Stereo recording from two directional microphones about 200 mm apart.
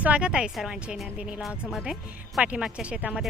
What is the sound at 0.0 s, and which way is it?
Speech, 5° right (ahead or behind).